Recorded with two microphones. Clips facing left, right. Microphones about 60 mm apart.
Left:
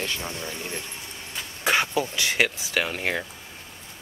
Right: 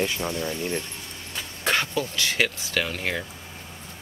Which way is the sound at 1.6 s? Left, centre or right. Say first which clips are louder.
Left 2 dB; centre.